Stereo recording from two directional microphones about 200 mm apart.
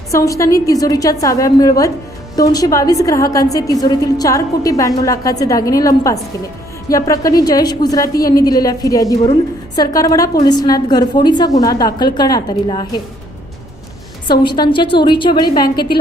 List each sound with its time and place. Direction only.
0.1 s a woman's voice: 15° left (ahead or behind)
14.3 s a woman's voice: 25° left (ahead or behind)